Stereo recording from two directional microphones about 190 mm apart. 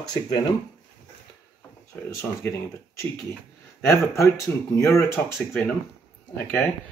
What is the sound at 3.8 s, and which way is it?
Speech, 15° left (ahead or behind).